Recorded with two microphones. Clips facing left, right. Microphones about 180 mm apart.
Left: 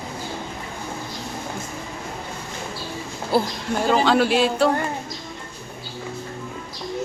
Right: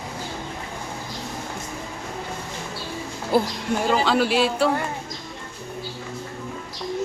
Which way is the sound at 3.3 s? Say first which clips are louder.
Even; 30° left (ahead or behind).